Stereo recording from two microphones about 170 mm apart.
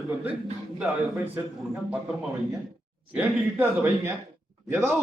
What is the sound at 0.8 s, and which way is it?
Speech, 10° right (ahead or behind).